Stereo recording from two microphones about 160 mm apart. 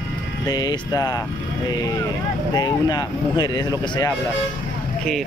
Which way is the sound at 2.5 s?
25° left (ahead or behind).